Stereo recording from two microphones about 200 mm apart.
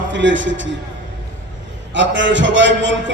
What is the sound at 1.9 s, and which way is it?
A man's voice, 65° right (ahead or behind).